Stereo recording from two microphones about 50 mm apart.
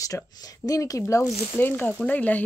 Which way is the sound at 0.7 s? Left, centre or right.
Left.